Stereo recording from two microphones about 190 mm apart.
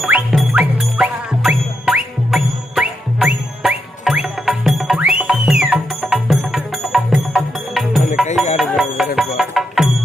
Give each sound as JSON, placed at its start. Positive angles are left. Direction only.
{"t": 0.0, "sound": "music", "side_deg": -5}